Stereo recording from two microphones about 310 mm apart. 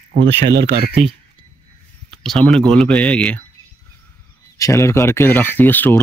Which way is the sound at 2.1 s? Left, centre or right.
Centre.